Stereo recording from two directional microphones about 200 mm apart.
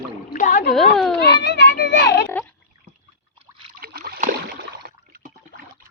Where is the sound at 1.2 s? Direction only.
55° left (ahead or behind).